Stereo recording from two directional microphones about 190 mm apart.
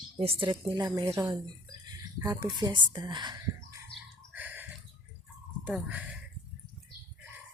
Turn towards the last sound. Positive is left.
turn(degrees=-5)  # may be behind; listen again after turning